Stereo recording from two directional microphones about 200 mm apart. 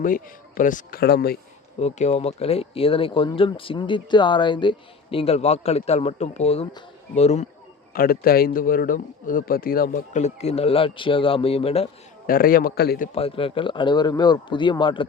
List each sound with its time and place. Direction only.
0.0 s speech: 45° left (ahead or behind)
1.8 s a man's voice: 35° left (ahead or behind)
7.9 s a man's voice: 45° left (ahead or behind); by 11.9 s 30° left (ahead or behind)
12.2 s speech: 45° left (ahead or behind)
13.1 s speech: 30° left (ahead or behind)